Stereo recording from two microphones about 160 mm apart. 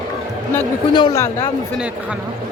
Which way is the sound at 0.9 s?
30° left (ahead or behind).